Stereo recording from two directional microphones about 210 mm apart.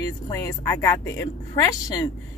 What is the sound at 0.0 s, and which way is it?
Speech, 15° left (ahead or behind).